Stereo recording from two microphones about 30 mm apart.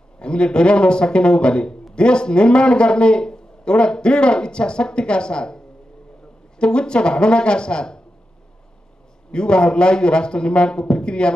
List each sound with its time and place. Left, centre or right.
0.2 s a man's voice: left
6.6 s a man's voice: left
9.3 s a man's voice: left